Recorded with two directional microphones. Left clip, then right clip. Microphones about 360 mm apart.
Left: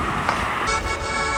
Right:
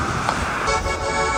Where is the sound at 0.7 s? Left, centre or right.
Right.